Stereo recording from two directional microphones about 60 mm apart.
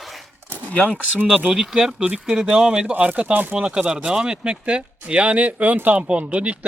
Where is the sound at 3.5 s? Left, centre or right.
Centre.